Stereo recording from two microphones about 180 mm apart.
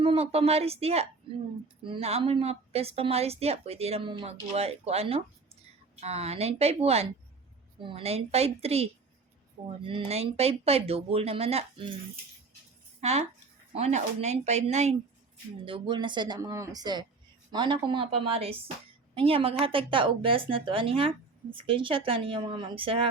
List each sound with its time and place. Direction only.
0.0 s speech: 30° right (ahead or behind)
13.0 s speech: 35° right (ahead or behind)
15.6 s a woman's voice: 30° right (ahead or behind)